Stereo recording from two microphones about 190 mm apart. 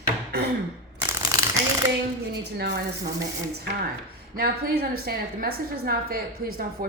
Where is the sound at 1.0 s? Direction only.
15° right (ahead or behind).